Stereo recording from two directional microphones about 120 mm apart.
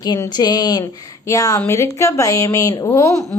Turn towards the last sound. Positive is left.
turn(degrees=25)  # may be behind; listen again after turning